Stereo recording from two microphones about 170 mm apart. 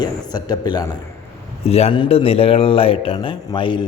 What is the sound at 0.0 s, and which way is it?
Speech, 25° left (ahead or behind).